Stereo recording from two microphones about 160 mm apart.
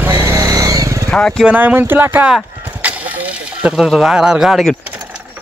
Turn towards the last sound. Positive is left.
turn(degrees=0)  # may be behind; listen again after turning